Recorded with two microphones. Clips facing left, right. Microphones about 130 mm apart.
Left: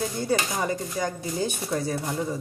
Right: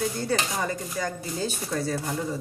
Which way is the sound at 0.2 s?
15° left (ahead or behind).